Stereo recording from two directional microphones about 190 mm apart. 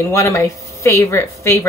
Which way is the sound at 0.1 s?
15° left (ahead or behind).